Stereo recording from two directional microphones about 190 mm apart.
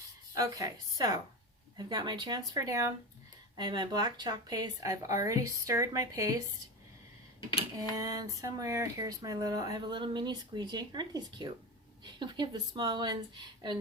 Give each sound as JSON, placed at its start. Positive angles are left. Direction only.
{"t": 0.3, "sound": "a woman's voice", "side_deg": -15}
{"t": 7.8, "sound": "speech", "side_deg": -15}